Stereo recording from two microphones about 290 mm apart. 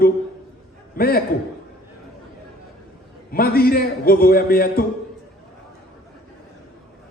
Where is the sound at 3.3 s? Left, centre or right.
Left.